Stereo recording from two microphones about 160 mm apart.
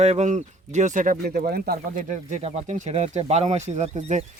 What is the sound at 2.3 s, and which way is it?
Speech, 45° right (ahead or behind).